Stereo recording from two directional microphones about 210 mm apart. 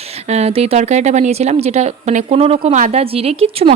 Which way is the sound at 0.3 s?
30° right (ahead or behind).